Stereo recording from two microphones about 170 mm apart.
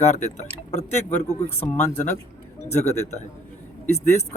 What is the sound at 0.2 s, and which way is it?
Speech, 40° left (ahead or behind).